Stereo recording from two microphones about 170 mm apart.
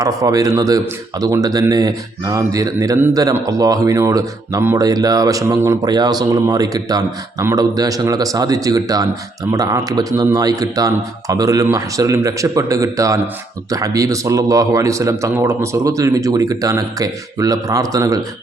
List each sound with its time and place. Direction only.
0.0 s speech: 20° right (ahead or behind)